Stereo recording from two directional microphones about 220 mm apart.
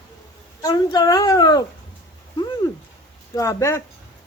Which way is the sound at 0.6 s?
15° left (ahead or behind).